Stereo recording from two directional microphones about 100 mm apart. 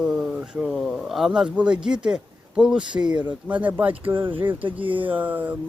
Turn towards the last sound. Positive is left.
turn(degrees=-15)  # may be behind; listen again after turning